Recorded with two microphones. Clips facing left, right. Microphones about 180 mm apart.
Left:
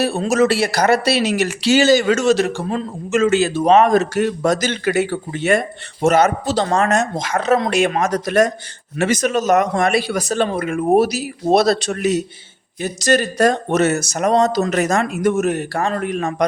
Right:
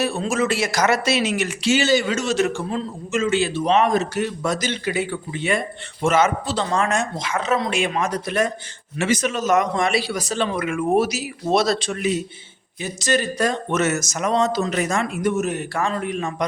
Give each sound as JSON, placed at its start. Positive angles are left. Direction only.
{"t": 0.0, "sound": "speech", "side_deg": 40}
{"t": 2.6, "sound": "speech", "side_deg": 50}
{"t": 10.7, "sound": "a man's voice", "side_deg": 40}